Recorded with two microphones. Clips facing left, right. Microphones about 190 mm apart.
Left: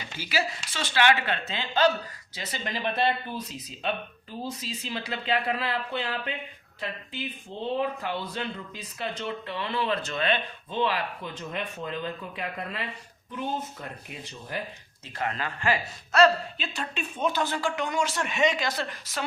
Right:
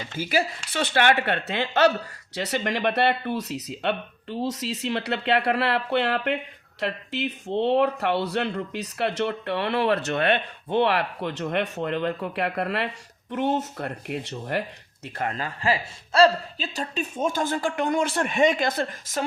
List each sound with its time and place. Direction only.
0.2 s speech: 50° right (ahead or behind); by 14.6 s 70° right (ahead or behind)
15.0 s speech: 45° right (ahead or behind)